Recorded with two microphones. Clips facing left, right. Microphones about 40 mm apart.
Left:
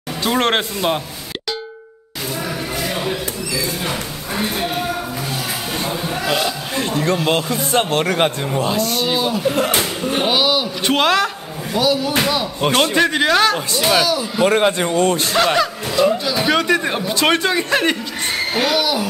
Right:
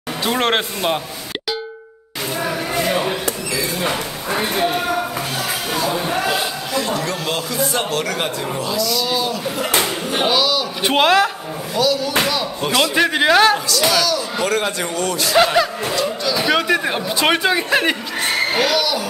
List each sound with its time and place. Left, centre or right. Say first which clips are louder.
0.2 s a man's voice: left 1 dB; centre
2.4 s a sound: right 5 dB; right
5.9 s a sound: right 2 dB; right
7.2 s speech: left 3 dB; left
9.0 s a man's voice: left 3 dB; centre
10.8 s speech: right 3 dB; centre
11.7 s speech: left 1 dB; centre
12.9 s speech: right 1 dB; centre
13.7 s speech: left 1 dB; left
15.3 s a man's voice: right 4 dB; centre
16.0 s speech: left 6 dB; centre
16.4 s a man's voice: left 1 dB; centre
18.6 s speech: even; centre